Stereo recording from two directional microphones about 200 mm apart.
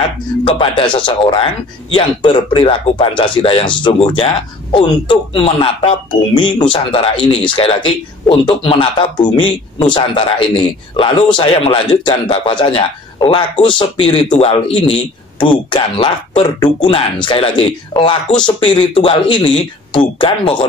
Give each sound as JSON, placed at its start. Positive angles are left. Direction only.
{"t": 0.5, "sound": "speech", "side_deg": 25}